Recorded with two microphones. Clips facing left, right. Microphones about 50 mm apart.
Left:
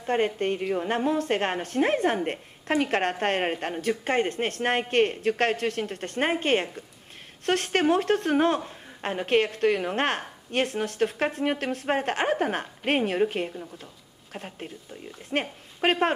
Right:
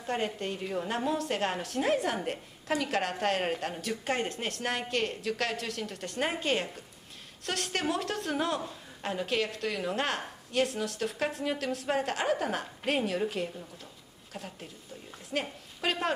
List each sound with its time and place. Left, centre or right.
0.0 s a woman's voice: left